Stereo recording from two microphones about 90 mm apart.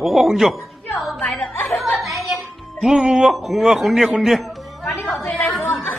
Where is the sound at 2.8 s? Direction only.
5° right (ahead or behind).